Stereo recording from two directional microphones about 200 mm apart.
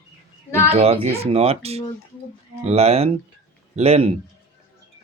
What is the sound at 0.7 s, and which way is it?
Speech, 30° right (ahead or behind).